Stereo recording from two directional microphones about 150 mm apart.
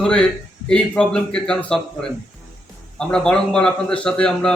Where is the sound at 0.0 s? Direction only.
5° left (ahead or behind).